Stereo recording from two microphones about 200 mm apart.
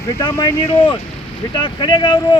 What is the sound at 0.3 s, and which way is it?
Speech, 20° left (ahead or behind).